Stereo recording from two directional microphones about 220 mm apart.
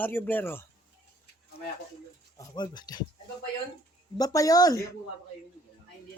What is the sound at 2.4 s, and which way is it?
Speech, 20° left (ahead or behind).